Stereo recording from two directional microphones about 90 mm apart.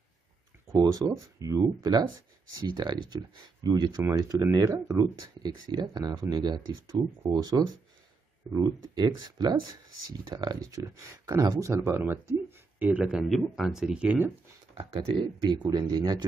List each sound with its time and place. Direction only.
0.7 s speech: 40° right (ahead or behind)
2.6 s speech: 55° right (ahead or behind); by 12.0 s 35° right (ahead or behind)
12.0 s speech: 20° right (ahead or behind)
13.3 s speech: centre (ahead or behind)
15.5 s speech: 50° right (ahead or behind)